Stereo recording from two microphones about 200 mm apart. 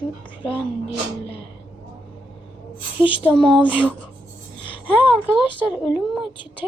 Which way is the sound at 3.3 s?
5° left (ahead or behind).